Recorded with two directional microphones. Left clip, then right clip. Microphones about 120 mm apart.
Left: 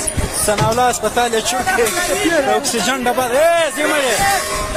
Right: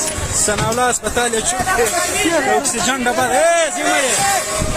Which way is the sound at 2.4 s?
Centre (ahead or behind).